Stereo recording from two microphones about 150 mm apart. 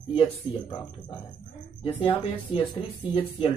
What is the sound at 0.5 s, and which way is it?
Speech, 10° right (ahead or behind).